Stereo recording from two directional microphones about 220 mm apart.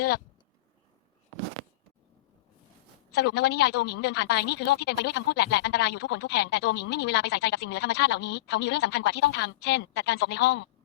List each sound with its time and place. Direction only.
3.1 s a woman's voice: 50° left (ahead or behind)